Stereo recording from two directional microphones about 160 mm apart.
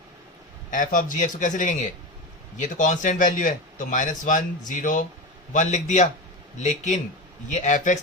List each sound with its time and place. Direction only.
0.7 s a man's voice: 55° left (ahead or behind)